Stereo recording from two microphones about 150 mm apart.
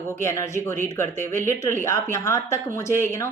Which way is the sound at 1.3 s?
60° right (ahead or behind).